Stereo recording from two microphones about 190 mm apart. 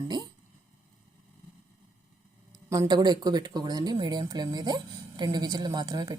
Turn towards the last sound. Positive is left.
turn(degrees=-20)  # may be behind; listen again after turning